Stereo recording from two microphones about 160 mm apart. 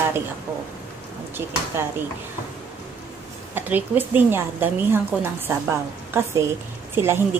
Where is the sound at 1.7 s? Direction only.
15° right (ahead or behind).